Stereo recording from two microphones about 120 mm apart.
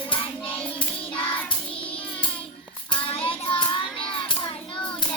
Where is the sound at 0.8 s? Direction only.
45° left (ahead or behind).